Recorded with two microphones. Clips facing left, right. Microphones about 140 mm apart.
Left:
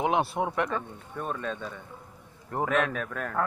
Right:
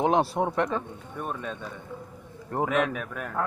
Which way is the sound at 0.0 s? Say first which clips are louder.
Right 3 dB; 35° right (ahead or behind).